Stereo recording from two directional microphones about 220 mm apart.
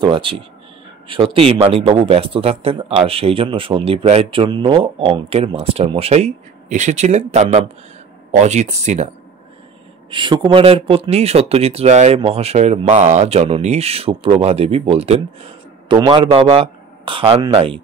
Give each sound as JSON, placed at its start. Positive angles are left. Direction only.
{"t": 0.0, "sound": "speech", "side_deg": -25}
{"t": 10.1, "sound": "speech", "side_deg": -20}